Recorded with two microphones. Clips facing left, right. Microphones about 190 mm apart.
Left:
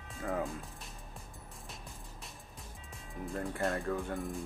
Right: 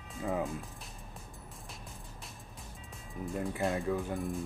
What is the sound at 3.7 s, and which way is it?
Speech, 15° right (ahead or behind).